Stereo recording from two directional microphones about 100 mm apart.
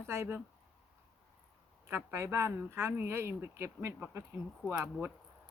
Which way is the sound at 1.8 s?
25° right (ahead or behind).